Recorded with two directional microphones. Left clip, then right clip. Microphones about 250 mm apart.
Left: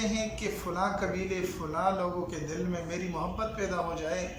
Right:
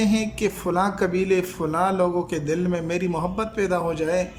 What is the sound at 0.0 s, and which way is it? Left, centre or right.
Speech, right.